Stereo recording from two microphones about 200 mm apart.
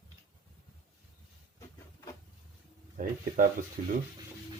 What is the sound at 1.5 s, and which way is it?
Printer, 15° left (ahead or behind).